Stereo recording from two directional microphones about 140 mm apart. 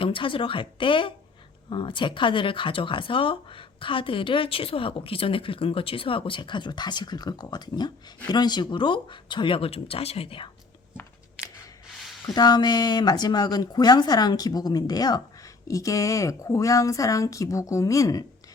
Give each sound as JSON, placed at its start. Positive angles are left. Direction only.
{"t": 0.0, "sound": "speech", "side_deg": 40}
{"t": 12.3, "sound": "speech", "side_deg": 30}